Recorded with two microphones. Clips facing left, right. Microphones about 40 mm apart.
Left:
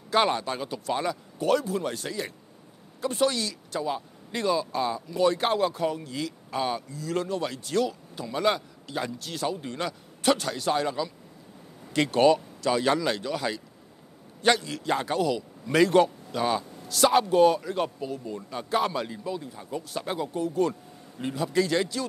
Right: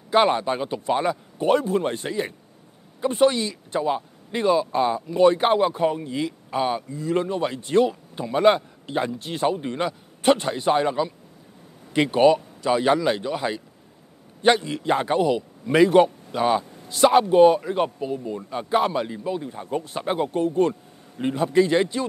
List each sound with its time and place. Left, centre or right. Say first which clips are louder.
0.1 s speech: right 5 dB; right
19.3 s speech: right 6 dB; right
20.2 s speech: right 5 dB; right